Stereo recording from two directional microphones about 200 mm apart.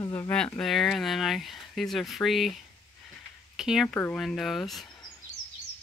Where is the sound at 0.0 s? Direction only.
15° left (ahead or behind).